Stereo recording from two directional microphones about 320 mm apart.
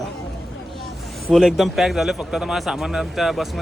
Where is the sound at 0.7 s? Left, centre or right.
Centre.